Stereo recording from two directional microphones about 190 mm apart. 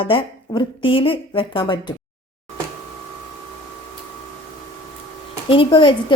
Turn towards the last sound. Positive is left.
turn(degrees=25)  # may be behind; listen again after turning